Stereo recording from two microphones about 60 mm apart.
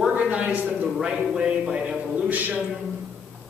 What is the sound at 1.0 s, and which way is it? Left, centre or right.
A man's voice, centre.